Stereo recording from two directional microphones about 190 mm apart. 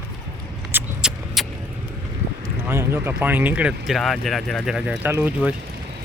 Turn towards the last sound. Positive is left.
turn(degrees=-10)  # may be behind; listen again after turning